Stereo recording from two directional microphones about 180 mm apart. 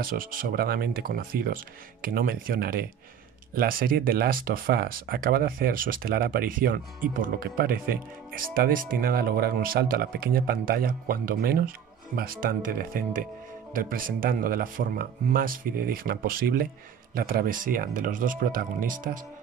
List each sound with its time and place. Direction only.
0.0 s speech: 50° right (ahead or behind)